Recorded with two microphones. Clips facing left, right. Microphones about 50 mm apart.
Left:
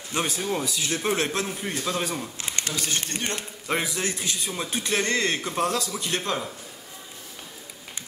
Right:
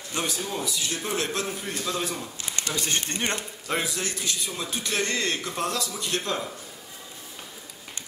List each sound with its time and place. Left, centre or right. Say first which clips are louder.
0.5 s a man's voice: left 3 dB; left; by 2.2 s centre
2.3 s speech: left 2 dB; left
2.7 s speech: right 3 dB; right
3.6 s a man's voice: left 2 dB; centre